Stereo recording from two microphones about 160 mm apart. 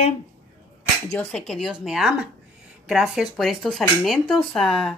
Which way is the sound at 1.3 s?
5° left (ahead or behind).